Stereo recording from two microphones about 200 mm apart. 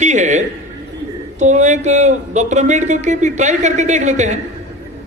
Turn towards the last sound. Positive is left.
turn(degrees=-35)  # may be behind; listen again after turning